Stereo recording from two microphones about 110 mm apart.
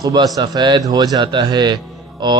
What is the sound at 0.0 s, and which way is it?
A man's voice, 40° right (ahead or behind).